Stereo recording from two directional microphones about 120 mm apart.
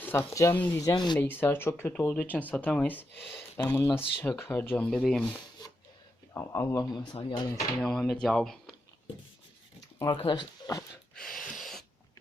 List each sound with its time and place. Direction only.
0.0 s speech: 20° left (ahead or behind); by 1.2 s 35° left (ahead or behind)
1.2 s speech: 15° left (ahead or behind)
4.9 s speech: 5° left (ahead or behind)
6.3 s speech: 25° left (ahead or behind)
7.1 s speech: 45° left (ahead or behind)
7.8 s speech: 5° left (ahead or behind)
10.2 s speech: 35° left (ahead or behind)
11.1 s a sound: 5° left (ahead or behind)